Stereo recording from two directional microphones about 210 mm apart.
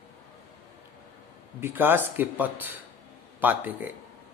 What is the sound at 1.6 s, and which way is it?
Speech, 10° right (ahead or behind).